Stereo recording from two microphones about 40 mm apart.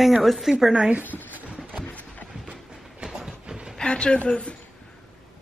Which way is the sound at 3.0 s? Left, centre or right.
Centre.